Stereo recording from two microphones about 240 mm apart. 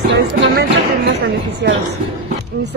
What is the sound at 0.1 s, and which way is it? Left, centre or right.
Music, right.